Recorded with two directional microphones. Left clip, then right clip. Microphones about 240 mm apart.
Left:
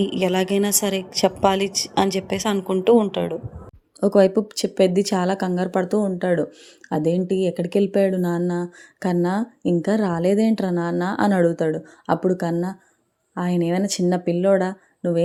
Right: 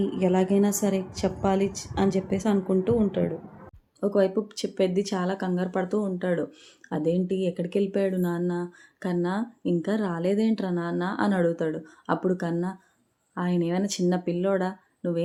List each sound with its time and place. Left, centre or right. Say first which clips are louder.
0.0 s a woman's voice: left 4 dB; left